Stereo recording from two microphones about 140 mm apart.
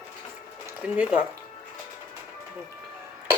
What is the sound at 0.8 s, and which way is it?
Speech, 10° right (ahead or behind).